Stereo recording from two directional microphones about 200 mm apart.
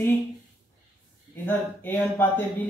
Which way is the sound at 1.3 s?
10° left (ahead or behind).